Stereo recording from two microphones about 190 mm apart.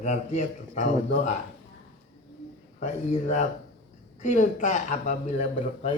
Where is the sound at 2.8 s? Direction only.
40° left (ahead or behind).